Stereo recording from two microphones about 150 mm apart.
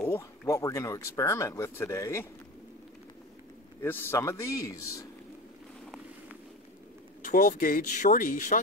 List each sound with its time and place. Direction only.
0.0 s speech: 20° left (ahead or behind)
3.8 s speech: 15° left (ahead or behind)
7.2 s speech: 60° left (ahead or behind)